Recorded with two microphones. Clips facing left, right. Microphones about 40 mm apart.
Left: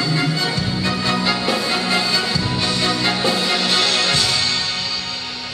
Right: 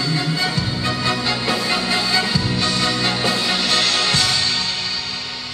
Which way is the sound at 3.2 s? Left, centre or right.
Left.